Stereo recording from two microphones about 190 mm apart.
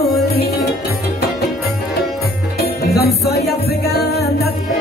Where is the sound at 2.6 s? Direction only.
60° left (ahead or behind).